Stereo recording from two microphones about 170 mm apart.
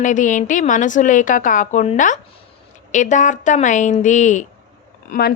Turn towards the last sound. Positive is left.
turn(degrees=65)  # may be behind; listen again after turning